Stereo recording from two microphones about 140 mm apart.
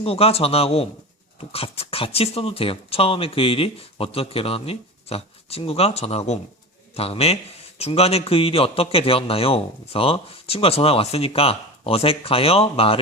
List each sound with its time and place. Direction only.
0.0 s a man's voice: 45° left (ahead or behind)